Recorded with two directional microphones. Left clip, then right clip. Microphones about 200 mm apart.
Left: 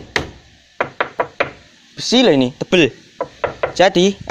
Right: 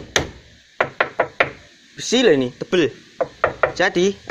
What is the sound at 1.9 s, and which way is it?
Speech, 35° left (ahead or behind).